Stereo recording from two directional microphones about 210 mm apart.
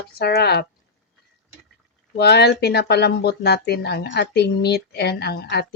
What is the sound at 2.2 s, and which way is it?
Speech, 50° left (ahead or behind).